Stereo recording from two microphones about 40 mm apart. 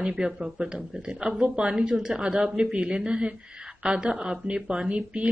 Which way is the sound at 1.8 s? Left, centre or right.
Centre.